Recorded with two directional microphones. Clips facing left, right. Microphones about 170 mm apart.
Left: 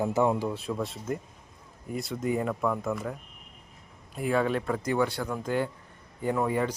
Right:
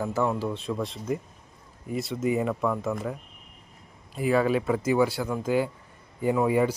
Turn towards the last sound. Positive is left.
turn(degrees=-10)  # may be behind; listen again after turning